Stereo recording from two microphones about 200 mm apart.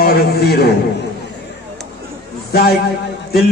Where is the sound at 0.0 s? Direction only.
55° left (ahead or behind).